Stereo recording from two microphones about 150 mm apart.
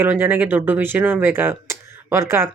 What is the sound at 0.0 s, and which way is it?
Speech, 15° right (ahead or behind).